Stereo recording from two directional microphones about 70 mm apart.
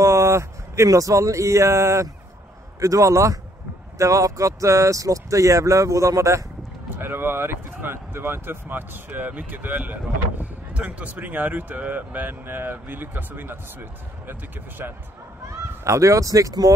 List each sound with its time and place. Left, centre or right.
0.0 s a sound: right
0.8 s speech: right
7.0 s speech: right
15.8 s speech: right